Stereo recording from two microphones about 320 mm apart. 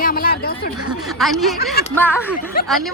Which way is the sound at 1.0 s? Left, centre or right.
Centre.